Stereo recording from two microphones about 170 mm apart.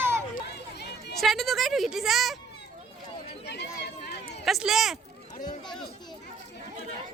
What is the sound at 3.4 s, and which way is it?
Chatter, 80° left.